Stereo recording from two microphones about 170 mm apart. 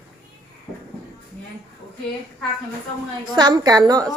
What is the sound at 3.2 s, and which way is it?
Speech, 25° right (ahead or behind).